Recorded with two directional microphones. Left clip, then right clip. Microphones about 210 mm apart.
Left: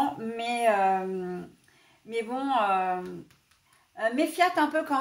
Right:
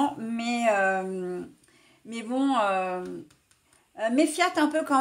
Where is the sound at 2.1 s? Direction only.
45° right (ahead or behind).